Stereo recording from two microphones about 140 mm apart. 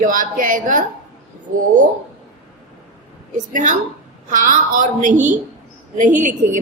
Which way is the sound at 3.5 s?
65° right (ahead or behind).